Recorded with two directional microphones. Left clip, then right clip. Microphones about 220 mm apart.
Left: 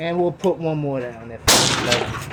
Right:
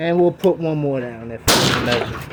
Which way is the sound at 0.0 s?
50° right (ahead or behind).